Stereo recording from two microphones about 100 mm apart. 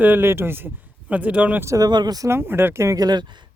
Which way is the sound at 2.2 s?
25° right (ahead or behind).